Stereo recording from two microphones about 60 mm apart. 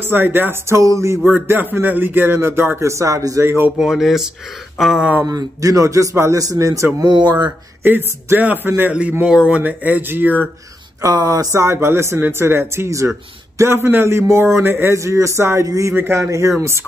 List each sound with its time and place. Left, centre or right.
0.0 s speech: right
0.7 s a man's voice: right
1.2 s speech: right
2.8 s a man's voice: right
3.7 s speech: centre
5.2 s a man's voice: right
7.8 s speech: right
9.3 s speech: centre
9.6 s speech: right
11.0 s a man's voice: right
15.0 s a man's voice: right
15.6 s speech: right
15.9 s speech: right
16.2 s a man's voice: right